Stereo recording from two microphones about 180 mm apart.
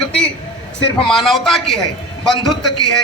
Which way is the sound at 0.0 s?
5° left (ahead or behind).